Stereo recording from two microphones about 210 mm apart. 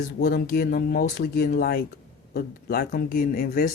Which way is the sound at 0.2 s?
50° left (ahead or behind).